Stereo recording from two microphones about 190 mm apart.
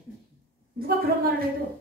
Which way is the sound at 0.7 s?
50° right (ahead or behind).